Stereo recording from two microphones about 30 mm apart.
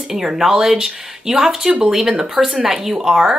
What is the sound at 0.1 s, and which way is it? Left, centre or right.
Speech, right.